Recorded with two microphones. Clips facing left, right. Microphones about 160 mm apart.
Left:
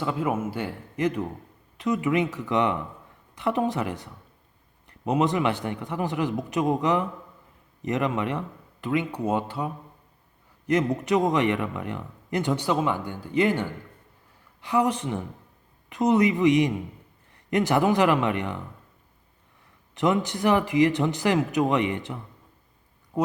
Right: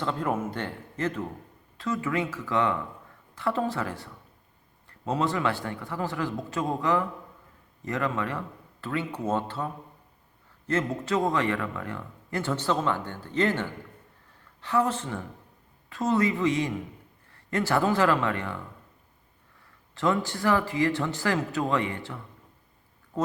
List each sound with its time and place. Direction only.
0.0 s a man's voice: 10° left (ahead or behind)
19.9 s speech: 20° left (ahead or behind)